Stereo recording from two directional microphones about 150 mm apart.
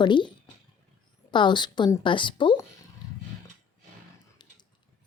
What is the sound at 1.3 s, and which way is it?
A woman's voice, 30° left (ahead or behind).